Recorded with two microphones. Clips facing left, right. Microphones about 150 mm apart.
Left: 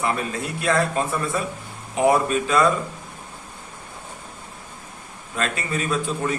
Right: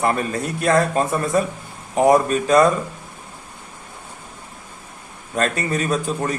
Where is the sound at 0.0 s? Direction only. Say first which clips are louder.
Right 4 dB; 45° right (ahead or behind).